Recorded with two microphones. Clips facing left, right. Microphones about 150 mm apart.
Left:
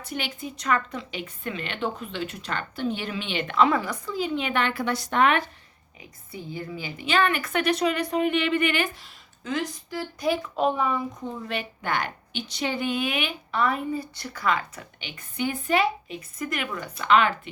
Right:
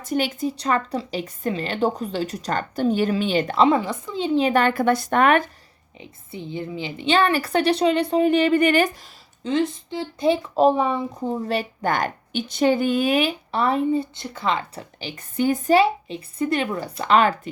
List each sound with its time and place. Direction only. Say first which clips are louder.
0.0 s speech: right 10 dB; 45° right (ahead or behind)
6.0 s speech: right 4 dB; 25° right (ahead or behind); by 8.9 s 40° right (ahead or behind)
9.4 s speech: right 7 dB; 25° right (ahead or behind)
15.1 s speech: right 7 dB; 40° right (ahead or behind)